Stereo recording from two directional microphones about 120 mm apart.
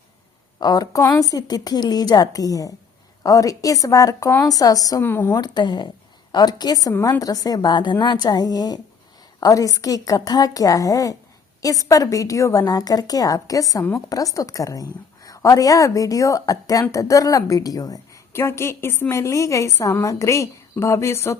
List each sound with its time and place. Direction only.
0.6 s a woman's voice: 35° left (ahead or behind)
5.0 s speech: 20° left (ahead or behind)
5.4 s a woman's voice: 35° left (ahead or behind)